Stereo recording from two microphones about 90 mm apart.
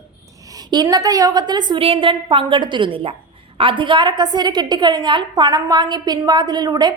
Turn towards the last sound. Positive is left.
turn(degrees=-50)  # may be behind; listen again after turning